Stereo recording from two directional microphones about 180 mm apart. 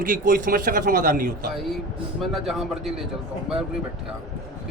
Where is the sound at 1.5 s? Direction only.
Centre (ahead or behind).